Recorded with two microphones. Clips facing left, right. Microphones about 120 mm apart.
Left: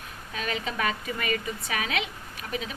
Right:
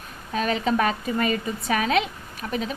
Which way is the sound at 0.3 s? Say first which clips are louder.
Right 8 dB; 35° right (ahead or behind).